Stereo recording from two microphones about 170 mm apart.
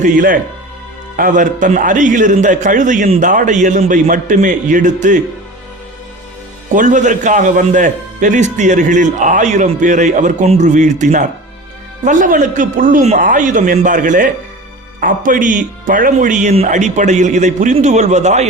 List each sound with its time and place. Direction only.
0.0 s a man's voice: 55° right (ahead or behind)
6.7 s a man's voice: 45° right (ahead or behind)